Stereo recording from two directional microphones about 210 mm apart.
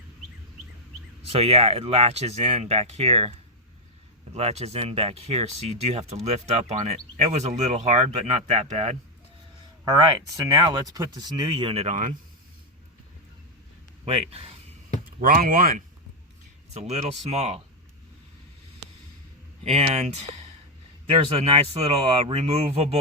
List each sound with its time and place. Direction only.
1.3 s speech: 30° right (ahead or behind)
4.4 s speech: 30° right (ahead or behind)
9.8 s speech: 20° right (ahead or behind)
14.0 s speech: 30° right (ahead or behind)
15.2 s speech: 45° right (ahead or behind)
16.8 s speech: 30° right (ahead or behind)
19.6 s speech: 30° right (ahead or behind)